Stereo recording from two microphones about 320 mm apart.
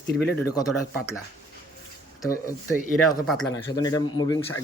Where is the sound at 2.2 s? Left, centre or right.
Centre.